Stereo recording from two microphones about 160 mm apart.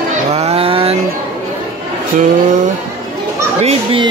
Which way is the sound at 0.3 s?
40° right (ahead or behind).